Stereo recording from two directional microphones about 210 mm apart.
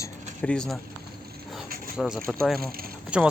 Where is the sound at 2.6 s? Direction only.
45° right (ahead or behind).